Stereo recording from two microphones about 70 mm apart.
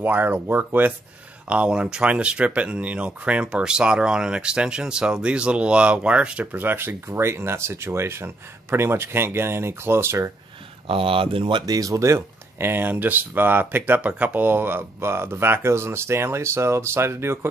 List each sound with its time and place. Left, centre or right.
0.0 s speech: right
1.5 s speech: centre; by 10.3 s right
11.6 s speech: right
14.0 s speech: centre; by 17.5 s right